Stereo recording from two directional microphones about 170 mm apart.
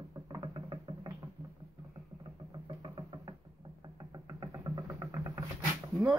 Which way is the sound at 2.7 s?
25° right (ahead or behind).